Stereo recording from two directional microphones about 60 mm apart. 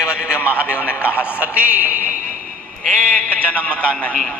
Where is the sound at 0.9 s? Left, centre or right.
Right.